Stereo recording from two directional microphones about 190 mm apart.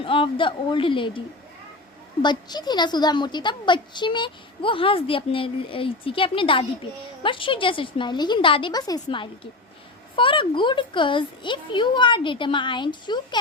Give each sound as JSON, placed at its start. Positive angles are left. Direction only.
{"t": 0.0, "sound": "a woman's voice", "side_deg": 25}
{"t": 2.2, "sound": "a woman's voice", "side_deg": 20}